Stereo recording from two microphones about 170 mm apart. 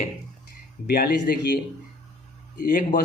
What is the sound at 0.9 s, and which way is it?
Speech, 60° left (ahead or behind).